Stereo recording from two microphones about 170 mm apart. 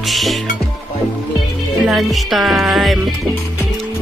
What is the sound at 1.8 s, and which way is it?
Music, centre (ahead or behind).